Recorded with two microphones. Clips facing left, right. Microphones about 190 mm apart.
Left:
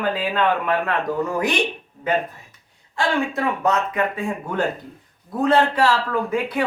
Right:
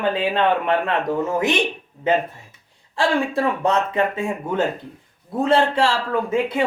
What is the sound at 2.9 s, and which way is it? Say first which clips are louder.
Speech: right 2 dB; 30° right (ahead or behind).